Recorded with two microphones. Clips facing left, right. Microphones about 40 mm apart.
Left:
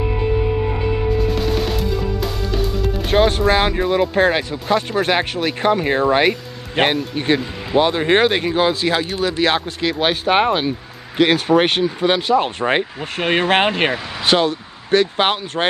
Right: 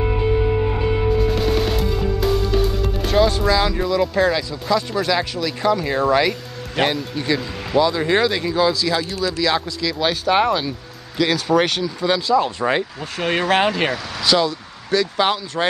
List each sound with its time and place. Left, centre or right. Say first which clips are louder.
1.3 s music: right 1 dB; centre
3.1 s speech: left 2 dB; left